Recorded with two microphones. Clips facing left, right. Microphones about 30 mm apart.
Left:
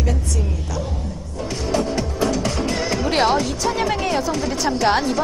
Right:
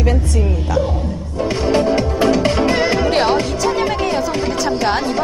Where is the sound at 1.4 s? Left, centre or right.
Right.